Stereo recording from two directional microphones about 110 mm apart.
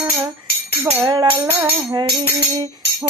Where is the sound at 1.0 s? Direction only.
40° right (ahead or behind).